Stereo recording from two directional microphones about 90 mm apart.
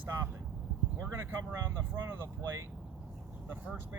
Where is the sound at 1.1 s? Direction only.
25° right (ahead or behind).